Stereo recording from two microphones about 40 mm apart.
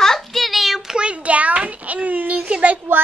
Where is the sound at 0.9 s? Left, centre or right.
Right.